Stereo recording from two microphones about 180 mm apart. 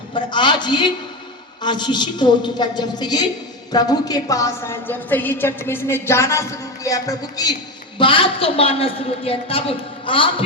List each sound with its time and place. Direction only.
0.1 s a woman's voice: 25° left (ahead or behind)